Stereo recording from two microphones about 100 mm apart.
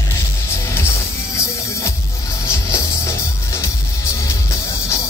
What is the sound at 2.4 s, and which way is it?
Music, 25° left (ahead or behind).